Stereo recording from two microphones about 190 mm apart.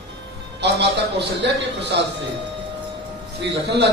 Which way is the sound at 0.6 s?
65° right (ahead or behind).